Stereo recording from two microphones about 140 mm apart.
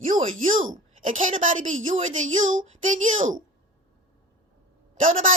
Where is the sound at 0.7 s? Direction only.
70° right (ahead or behind).